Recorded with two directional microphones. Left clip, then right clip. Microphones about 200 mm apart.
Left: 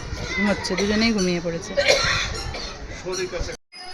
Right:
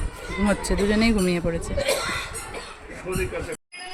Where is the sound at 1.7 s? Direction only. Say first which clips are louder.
Left 7 dB; 30° left (ahead or behind).